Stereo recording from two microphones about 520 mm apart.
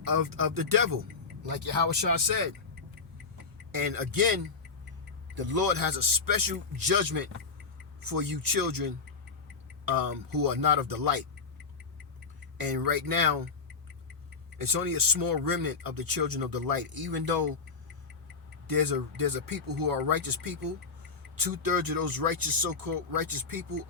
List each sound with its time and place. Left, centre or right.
0.0 s speech: right
2.1 s speech: right
3.7 s speech: right
5.5 s speech: right
12.5 s speech: right
14.6 s speech: right
18.7 s speech: right